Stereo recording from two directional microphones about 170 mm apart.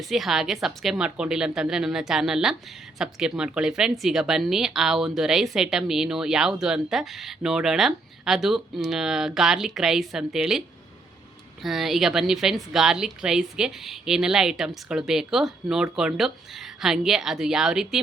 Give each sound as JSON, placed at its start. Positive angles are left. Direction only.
{"t": 0.1, "sound": "speech", "side_deg": 0}
{"t": 11.6, "sound": "speech", "side_deg": 0}